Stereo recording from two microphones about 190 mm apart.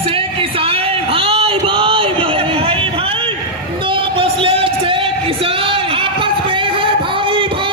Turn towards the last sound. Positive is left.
turn(degrees=-25)  # may be behind; listen again after turning